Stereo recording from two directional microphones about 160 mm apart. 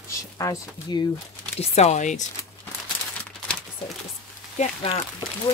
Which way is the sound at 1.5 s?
45° left (ahead or behind).